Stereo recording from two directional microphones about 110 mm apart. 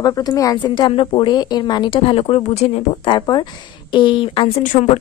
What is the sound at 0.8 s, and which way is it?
Speech, 50° left (ahead or behind).